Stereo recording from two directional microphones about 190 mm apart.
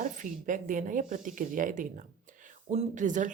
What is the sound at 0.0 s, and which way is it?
Speech, 45° right (ahead or behind).